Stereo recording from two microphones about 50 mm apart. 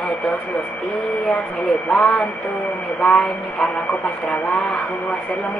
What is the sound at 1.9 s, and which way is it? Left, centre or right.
Speech, centre.